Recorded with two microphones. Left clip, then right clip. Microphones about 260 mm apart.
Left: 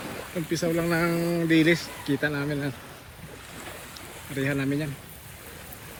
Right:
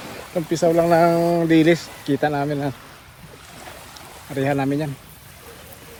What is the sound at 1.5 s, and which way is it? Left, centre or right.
Speech, centre.